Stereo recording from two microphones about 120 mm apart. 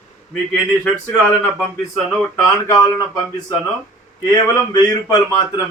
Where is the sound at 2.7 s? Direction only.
30° left (ahead or behind).